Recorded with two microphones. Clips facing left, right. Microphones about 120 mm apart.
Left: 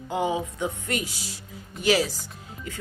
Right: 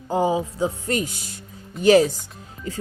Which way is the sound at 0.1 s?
35° right (ahead or behind).